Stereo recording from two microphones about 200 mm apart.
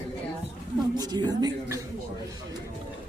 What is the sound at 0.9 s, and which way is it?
Speech, 20° right (ahead or behind).